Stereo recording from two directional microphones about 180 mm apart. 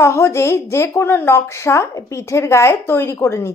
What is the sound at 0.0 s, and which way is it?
A woman's voice, 15° left (ahead or behind).